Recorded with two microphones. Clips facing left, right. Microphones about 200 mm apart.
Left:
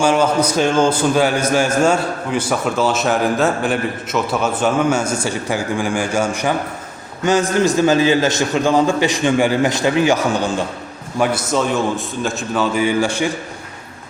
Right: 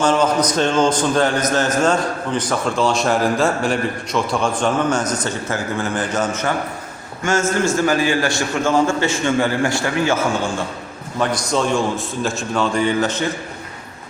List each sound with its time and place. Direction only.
0.0 s a man's voice: 10° left (ahead or behind)
11.2 s a man's voice: 5° left (ahead or behind)